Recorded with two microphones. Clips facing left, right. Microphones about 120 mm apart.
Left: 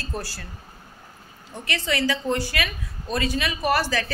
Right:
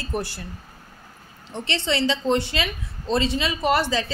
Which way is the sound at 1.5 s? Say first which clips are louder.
Right 2 dB; 25° right (ahead or behind).